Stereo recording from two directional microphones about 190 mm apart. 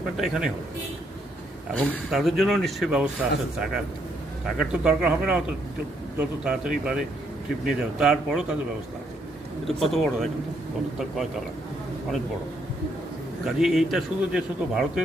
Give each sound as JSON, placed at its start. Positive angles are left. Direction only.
{"t": 0.2, "sound": "speech", "side_deg": -5}
{"t": 1.8, "sound": "speech", "side_deg": 5}
{"t": 9.6, "sound": "speech", "side_deg": 0}
{"t": 13.4, "sound": "speech", "side_deg": 0}